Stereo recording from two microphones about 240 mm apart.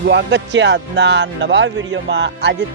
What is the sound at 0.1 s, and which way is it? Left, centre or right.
Speech, right.